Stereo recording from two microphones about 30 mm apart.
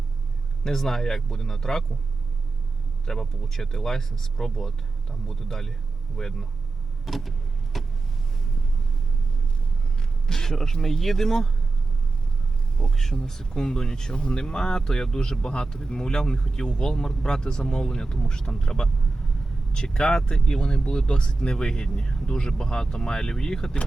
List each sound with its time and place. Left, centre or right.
0.6 s speech: centre
3.1 s speech: centre
7.0 s vehicle: centre
10.2 s speech: centre
12.7 s speech: centre